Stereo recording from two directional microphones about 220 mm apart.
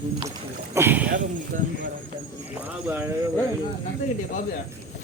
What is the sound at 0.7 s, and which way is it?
Speech, 10° right (ahead or behind).